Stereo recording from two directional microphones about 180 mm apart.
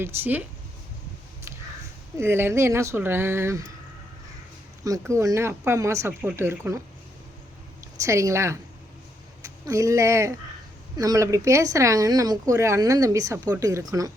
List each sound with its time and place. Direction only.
0.0 s speech: 10° right (ahead or behind)
2.1 s speech: 15° right (ahead or behind)
4.8 s speech: 15° right (ahead or behind)
8.0 s speech: 15° right (ahead or behind)